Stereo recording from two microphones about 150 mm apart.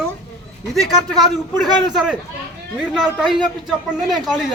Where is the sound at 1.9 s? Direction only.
5° right (ahead or behind).